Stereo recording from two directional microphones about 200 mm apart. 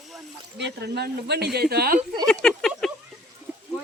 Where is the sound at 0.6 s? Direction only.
60° right (ahead or behind).